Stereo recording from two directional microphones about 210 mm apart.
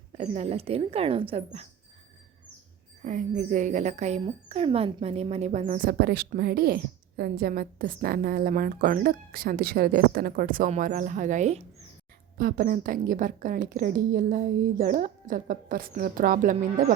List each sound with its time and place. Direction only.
0.2 s a woman's voice: 30° right (ahead or behind)
3.0 s a woman's voice: 35° right (ahead or behind)